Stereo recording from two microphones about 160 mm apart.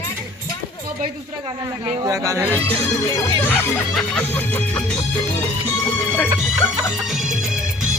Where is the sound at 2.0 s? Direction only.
20° right (ahead or behind).